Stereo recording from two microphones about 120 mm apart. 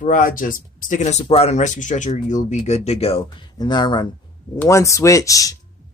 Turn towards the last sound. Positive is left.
turn(degrees=30)  # may be behind; listen again after turning